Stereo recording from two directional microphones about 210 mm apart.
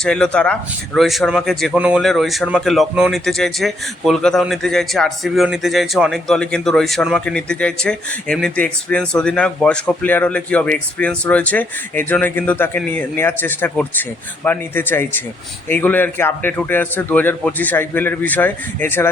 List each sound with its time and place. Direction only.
0.0 s speech: 5° left (ahead or behind)